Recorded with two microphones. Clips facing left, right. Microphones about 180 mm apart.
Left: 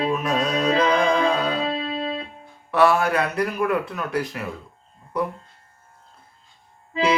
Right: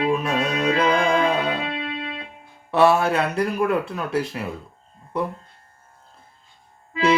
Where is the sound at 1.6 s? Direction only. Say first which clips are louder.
Left 3 dB; 30° left (ahead or behind).